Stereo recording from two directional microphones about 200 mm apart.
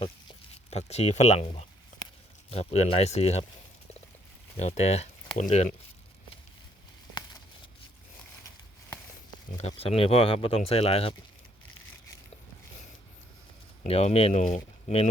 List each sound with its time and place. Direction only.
0.0 s speech: 30° left (ahead or behind)
4.5 s speech: 35° left (ahead or behind)
9.6 s speech: 30° left (ahead or behind)
13.8 s speech: 30° left (ahead or behind)